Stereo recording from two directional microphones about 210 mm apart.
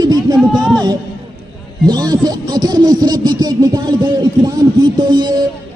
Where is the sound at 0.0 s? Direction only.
20° right (ahead or behind).